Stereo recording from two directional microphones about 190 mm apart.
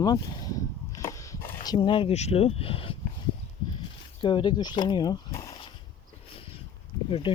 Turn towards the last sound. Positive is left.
turn(degrees=25)  # may be behind; listen again after turning